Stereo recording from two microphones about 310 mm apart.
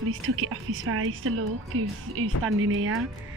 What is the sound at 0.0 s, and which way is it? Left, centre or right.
A woman's voice, right.